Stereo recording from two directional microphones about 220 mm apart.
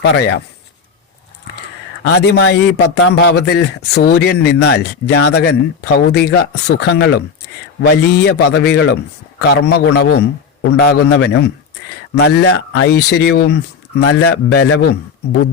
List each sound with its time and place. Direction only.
0.0 s speech: 50° left (ahead or behind)
2.0 s speech: 50° left (ahead or behind)